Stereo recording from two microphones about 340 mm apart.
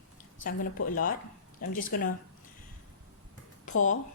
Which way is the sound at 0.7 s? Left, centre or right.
Left.